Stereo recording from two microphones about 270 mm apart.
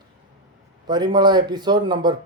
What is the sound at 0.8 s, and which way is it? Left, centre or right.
Speech, centre.